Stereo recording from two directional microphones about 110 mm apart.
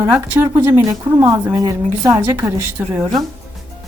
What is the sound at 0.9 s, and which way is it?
A woman's voice, 30° right (ahead or behind).